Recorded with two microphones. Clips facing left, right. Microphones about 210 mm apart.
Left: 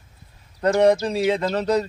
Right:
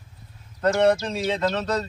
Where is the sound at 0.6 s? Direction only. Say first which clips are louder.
Left 3 dB; 10° left (ahead or behind).